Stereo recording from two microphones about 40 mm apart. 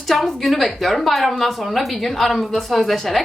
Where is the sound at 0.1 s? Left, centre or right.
Centre.